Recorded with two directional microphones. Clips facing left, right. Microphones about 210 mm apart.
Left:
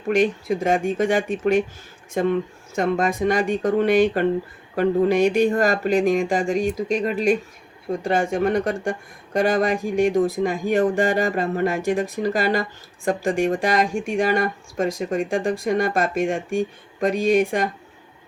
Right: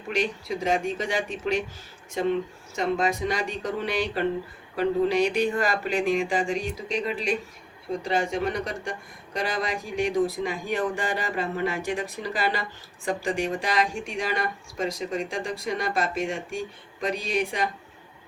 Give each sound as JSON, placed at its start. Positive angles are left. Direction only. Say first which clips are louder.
{"t": 0.1, "sound": "speech", "louder": "left 8 dB", "side_deg": 50}